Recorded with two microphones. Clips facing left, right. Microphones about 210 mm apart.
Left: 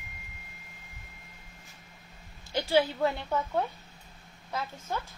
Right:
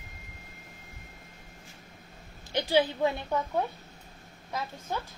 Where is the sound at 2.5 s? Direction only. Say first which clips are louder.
Even; 15° right (ahead or behind).